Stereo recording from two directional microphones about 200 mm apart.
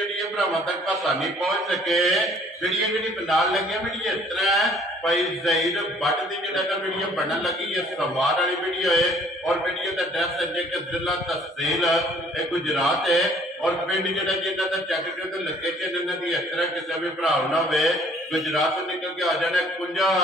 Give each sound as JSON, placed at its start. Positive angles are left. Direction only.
{"t": 1.2, "sound": "a man's voice", "side_deg": 0}
{"t": 11.6, "sound": "a man's voice", "side_deg": 0}
{"t": 16.3, "sound": "a man's voice", "side_deg": 0}